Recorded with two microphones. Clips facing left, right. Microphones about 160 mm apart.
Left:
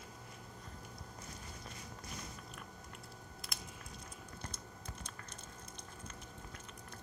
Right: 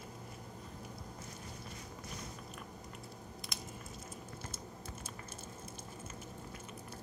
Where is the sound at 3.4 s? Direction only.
Centre (ahead or behind).